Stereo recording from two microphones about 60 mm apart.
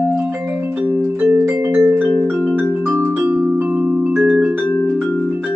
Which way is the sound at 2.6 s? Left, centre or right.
Right.